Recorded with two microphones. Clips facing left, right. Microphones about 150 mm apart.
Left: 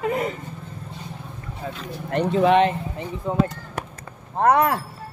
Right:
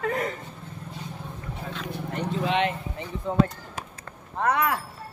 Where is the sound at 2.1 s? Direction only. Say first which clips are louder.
Left 10 dB; 85° left.